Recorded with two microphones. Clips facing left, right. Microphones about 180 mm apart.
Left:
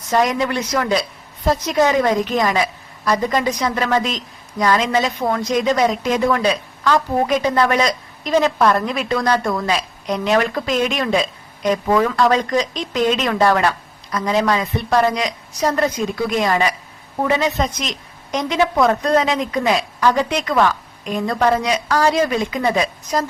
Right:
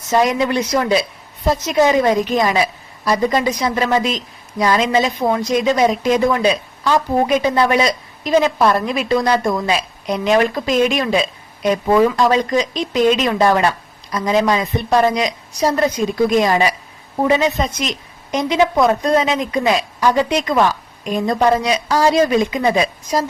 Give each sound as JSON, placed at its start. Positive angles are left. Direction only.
{"t": 0.3, "sound": "a woman's voice", "side_deg": -20}
{"t": 17.6, "sound": "a woman's voice", "side_deg": -10}